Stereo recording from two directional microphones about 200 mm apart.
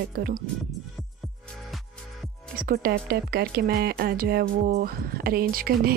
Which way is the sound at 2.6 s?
50° right (ahead or behind).